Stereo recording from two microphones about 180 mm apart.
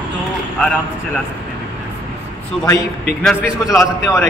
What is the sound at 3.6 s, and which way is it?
Speech, 15° left (ahead or behind).